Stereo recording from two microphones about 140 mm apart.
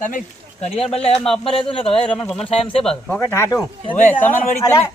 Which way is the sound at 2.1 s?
5° left (ahead or behind).